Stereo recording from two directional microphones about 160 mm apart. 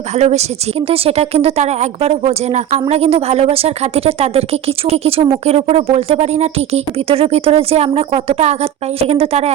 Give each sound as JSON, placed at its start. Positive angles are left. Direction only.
{"t": 0.2, "sound": "a woman's voice", "side_deg": -40}